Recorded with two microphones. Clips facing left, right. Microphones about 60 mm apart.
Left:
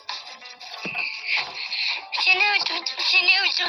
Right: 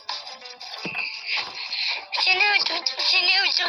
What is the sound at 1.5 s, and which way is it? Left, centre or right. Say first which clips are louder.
Synthetic singing: left 1 dB; right.